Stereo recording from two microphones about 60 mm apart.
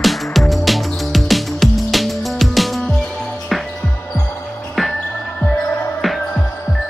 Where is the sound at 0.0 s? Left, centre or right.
Centre.